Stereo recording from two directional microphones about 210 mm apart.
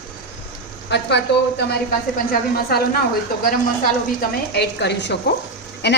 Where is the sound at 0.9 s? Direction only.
55° left (ahead or behind).